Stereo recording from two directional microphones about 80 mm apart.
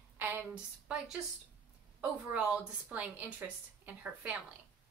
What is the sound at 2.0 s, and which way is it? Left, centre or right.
A woman's voice, centre.